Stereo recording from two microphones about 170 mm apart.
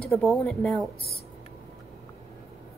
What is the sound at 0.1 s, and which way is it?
Speech, centre (ahead or behind).